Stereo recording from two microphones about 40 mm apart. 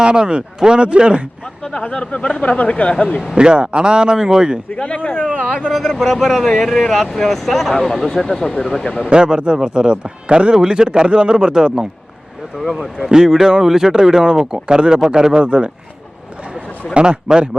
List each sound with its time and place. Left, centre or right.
0.0 s speech: right
1.6 s speech: left
3.3 s speech: right
4.7 s speech: left
5.7 s speech: centre
9.0 s speech: right
13.0 s speech: centre
15.4 s speech: right
16.9 s speech: right